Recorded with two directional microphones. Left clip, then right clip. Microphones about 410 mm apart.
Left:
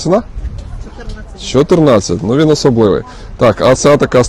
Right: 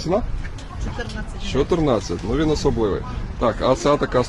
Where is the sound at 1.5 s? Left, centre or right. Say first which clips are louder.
Left 11 dB; left.